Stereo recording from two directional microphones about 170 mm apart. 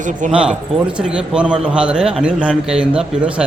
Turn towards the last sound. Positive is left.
turn(degrees=-5)  # may be behind; listen again after turning